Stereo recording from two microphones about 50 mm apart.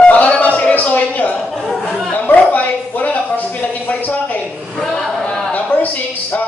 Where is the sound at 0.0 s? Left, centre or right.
Left.